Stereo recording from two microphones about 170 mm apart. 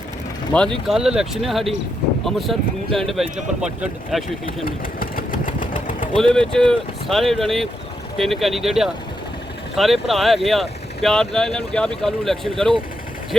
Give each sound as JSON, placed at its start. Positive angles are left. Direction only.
{"t": 0.5, "sound": "speech", "side_deg": 5}
{"t": 4.6, "sound": "engine", "side_deg": 55}
{"t": 6.1, "sound": "speech", "side_deg": 5}